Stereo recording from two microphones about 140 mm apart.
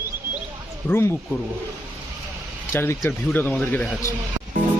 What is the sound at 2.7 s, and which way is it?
Speech, 15° left (ahead or behind).